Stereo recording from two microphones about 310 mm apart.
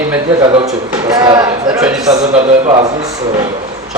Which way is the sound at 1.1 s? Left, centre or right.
Centre.